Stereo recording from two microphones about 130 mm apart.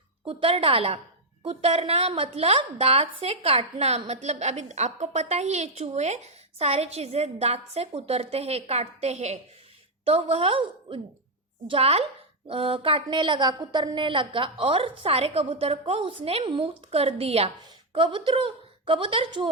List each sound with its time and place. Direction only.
0.3 s a woman's voice: 45° right (ahead or behind)
10.1 s a woman's voice: 50° right (ahead or behind)